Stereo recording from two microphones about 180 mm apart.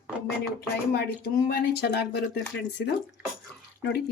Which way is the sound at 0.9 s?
60° left (ahead or behind).